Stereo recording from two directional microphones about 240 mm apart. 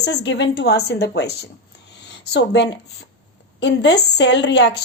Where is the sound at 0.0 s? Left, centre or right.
Left.